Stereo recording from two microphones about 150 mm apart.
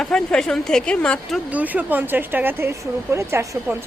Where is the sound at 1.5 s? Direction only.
10° right (ahead or behind).